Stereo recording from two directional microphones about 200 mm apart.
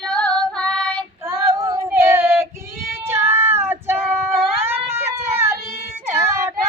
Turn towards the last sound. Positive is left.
turn(degrees=-10)  # may be behind; listen again after turning